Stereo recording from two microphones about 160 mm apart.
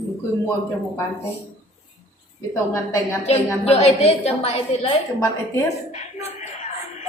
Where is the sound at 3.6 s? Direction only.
40° left (ahead or behind).